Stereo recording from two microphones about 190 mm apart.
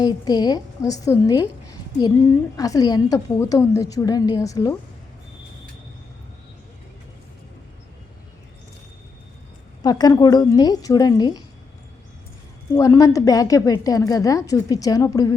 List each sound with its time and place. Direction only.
0.0 s a woman's voice: 20° left (ahead or behind)
9.8 s a woman's voice: 20° left (ahead or behind)
12.7 s a woman's voice: 15° left (ahead or behind)